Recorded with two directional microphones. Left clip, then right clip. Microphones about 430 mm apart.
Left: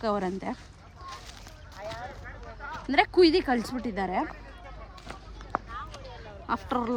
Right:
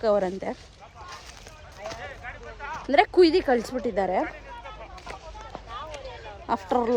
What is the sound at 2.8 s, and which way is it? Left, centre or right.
Speech, centre.